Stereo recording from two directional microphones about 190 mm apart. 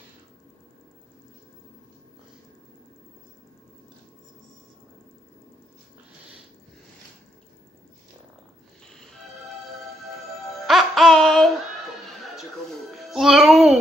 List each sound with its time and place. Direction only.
10.5 s music: centre (ahead or behind)
12.9 s music: centre (ahead or behind)